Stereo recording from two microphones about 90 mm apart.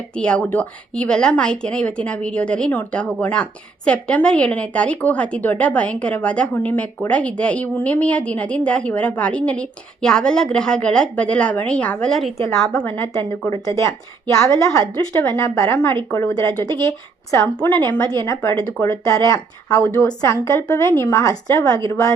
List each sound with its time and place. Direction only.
0.2 s a woman's voice: 10° left (ahead or behind)
12.4 s a woman's voice: 25° left (ahead or behind)
17.6 s a woman's voice: 30° left (ahead or behind)